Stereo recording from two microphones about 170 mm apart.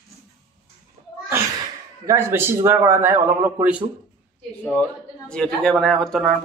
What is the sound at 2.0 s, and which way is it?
A man's voice, 15° right (ahead or behind).